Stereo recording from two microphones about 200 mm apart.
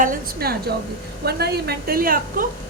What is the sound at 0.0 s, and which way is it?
A woman's voice, 45° right (ahead or behind).